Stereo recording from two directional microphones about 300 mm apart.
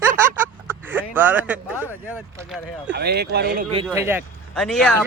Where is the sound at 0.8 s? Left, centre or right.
Centre.